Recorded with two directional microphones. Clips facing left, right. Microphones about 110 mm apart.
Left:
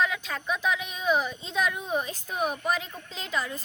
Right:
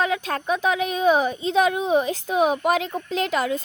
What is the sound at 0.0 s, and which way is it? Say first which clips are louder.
A woman's voice: right 5 dB; 60° right (ahead or behind).